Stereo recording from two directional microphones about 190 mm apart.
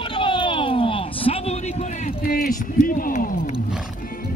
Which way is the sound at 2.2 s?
45° left (ahead or behind).